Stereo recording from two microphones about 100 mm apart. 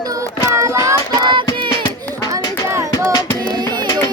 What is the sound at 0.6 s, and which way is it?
Child singing, 30° right (ahead or behind).